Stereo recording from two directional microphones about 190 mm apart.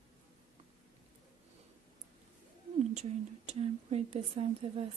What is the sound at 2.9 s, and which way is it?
Speech, 35° right (ahead or behind).